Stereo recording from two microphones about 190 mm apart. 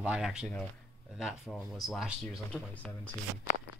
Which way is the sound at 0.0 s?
5° right (ahead or behind).